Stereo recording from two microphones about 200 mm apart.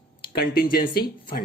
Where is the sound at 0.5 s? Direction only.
50° left (ahead or behind).